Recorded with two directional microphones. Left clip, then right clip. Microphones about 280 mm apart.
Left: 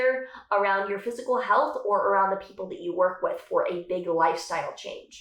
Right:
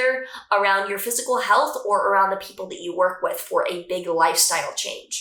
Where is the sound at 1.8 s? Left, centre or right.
Centre.